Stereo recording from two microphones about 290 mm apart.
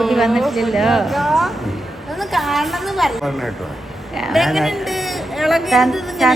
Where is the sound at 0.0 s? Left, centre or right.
Centre.